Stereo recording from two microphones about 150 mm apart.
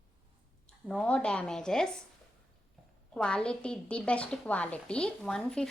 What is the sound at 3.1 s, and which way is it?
A woman's voice, 5° left (ahead or behind).